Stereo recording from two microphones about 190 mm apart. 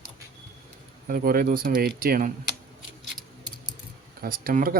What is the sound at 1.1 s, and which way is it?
Speech, 50° right (ahead or behind).